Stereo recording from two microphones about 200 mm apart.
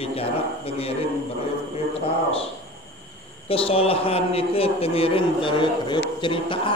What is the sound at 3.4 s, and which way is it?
A man's voice, 30° left (ahead or behind).